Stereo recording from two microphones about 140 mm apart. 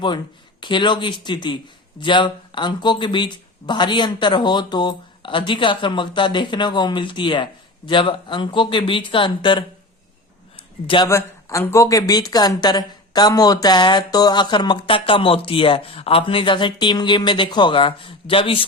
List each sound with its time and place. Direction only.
0.6 s speech: 35° left (ahead or behind)
10.8 s speech: 35° left (ahead or behind)
11.1 s speech: 20° left (ahead or behind); by 18.6 s 40° left (ahead or behind)